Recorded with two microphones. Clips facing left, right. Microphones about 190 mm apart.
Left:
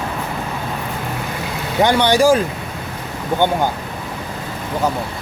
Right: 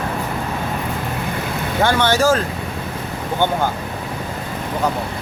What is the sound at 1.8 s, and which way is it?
Speech, 15° left (ahead or behind).